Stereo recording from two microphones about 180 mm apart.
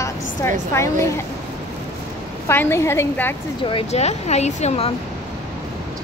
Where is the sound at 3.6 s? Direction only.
35° left (ahead or behind).